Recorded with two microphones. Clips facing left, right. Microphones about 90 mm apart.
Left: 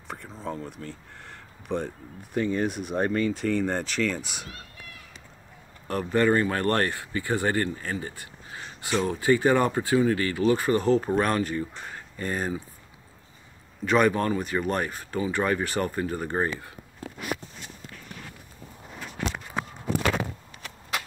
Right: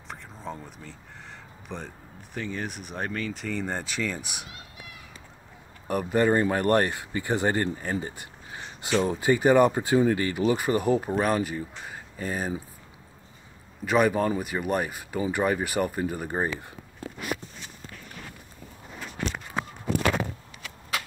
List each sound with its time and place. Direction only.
0.1 s speech: centre (ahead or behind)
5.9 s speech: 15° right (ahead or behind)
13.8 s speech: 5° right (ahead or behind)